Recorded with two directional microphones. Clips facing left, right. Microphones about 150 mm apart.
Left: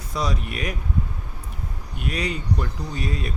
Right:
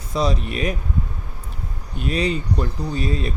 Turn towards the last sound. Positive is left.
turn(degrees=-25)  # may be behind; listen again after turning